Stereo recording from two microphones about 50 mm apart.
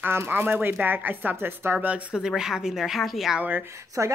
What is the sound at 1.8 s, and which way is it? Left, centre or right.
Speech, right.